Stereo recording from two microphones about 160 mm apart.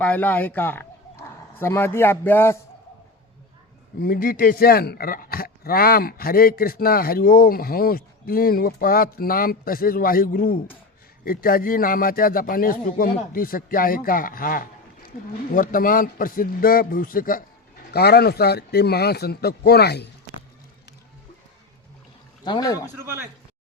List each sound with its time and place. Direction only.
0.0 s speech: 10° left (ahead or behind)
4.0 s a man's voice: 60° left (ahead or behind)
17.9 s speech: 80° left
22.4 s speech: 25° left (ahead or behind)
23.0 s speech: 15° right (ahead or behind)